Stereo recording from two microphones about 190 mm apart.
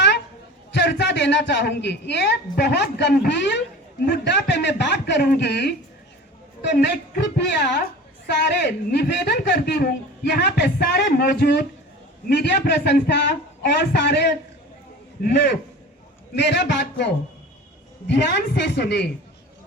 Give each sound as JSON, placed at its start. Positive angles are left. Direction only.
{"t": 0.7, "sound": "speech", "side_deg": 65}
{"t": 18.1, "sound": "speech", "side_deg": 65}